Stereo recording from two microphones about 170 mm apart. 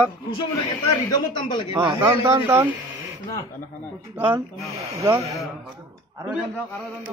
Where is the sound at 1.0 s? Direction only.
25° left (ahead or behind).